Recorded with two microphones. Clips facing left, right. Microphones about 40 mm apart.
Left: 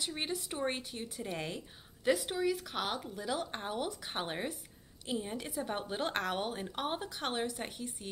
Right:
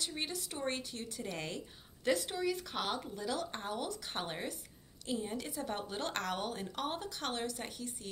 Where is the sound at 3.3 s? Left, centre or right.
Centre.